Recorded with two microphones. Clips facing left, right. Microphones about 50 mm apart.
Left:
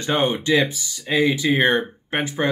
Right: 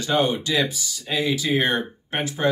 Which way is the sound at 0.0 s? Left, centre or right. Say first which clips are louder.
Left 1 dB; left.